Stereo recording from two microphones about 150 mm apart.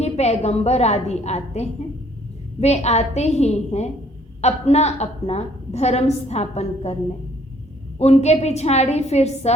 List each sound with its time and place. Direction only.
0.0 s a woman's voice: 45° left (ahead or behind)
7.9 s a woman's voice: 45° left (ahead or behind)